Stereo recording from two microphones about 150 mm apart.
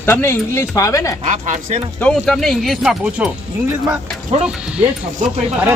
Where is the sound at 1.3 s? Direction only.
55° right (ahead or behind).